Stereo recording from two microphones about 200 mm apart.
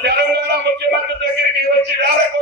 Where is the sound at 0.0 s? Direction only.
55° right (ahead or behind).